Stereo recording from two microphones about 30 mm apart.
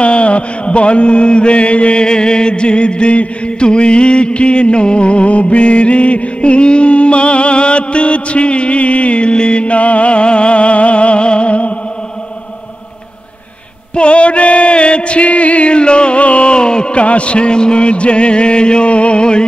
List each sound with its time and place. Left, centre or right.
0.0 s music: left
2.0 s music: left
13.9 s music: left
16.5 s a sound: left
16.9 s music: left